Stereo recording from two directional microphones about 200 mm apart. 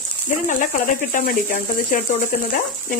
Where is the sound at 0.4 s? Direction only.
40° left (ahead or behind).